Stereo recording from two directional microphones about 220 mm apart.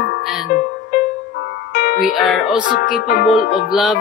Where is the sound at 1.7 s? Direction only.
45° left (ahead or behind).